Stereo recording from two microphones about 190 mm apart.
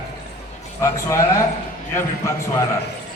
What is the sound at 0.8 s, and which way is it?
A man's voice, 15° left (ahead or behind).